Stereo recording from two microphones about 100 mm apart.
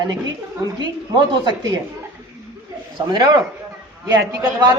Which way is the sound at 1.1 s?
45° right (ahead or behind).